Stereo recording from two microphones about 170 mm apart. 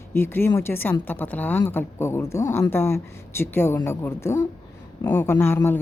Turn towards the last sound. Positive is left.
turn(degrees=10)  # may be behind; listen again after turning